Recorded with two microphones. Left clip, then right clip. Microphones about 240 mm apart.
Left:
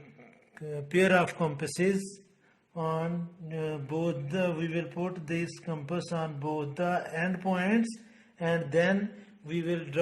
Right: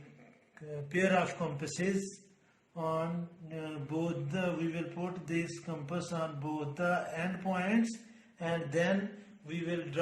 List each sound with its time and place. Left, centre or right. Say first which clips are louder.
0.7 s mantra: left 6 dB; left